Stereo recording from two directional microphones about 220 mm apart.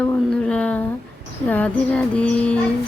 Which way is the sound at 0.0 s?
5° left (ahead or behind).